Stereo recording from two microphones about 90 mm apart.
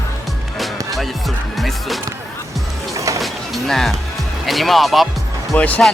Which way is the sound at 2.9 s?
35° right (ahead or behind).